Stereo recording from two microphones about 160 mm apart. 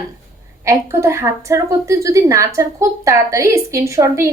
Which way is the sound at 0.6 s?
15° right (ahead or behind).